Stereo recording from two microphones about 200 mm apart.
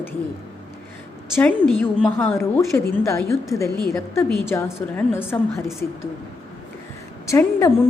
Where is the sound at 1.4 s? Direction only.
5° left (ahead or behind).